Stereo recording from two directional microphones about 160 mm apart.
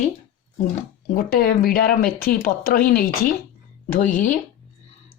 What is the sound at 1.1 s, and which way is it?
Speech, 70° left (ahead or behind).